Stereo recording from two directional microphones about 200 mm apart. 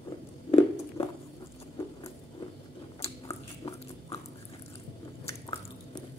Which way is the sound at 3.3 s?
15° left (ahead or behind).